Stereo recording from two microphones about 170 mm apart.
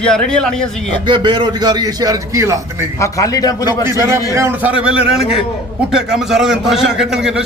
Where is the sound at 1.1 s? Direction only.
25° right (ahead or behind).